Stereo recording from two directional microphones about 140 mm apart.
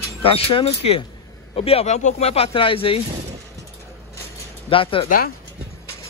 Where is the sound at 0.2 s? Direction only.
40° left (ahead or behind).